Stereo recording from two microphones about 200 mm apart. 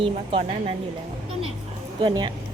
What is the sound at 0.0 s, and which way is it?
Speech, 30° right (ahead or behind).